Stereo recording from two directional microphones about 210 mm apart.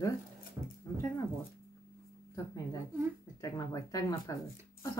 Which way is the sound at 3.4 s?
15° left (ahead or behind).